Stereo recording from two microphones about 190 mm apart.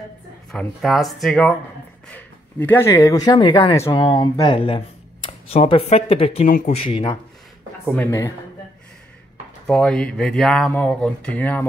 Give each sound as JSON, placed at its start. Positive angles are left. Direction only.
{"t": 0.5, "sound": "speech", "side_deg": 0}
{"t": 9.7, "sound": "speech", "side_deg": 5}